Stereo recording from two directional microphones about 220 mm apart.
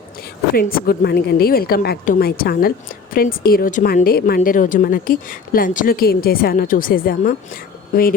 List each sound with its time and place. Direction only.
0.5 s a woman's voice: 40° left (ahead or behind)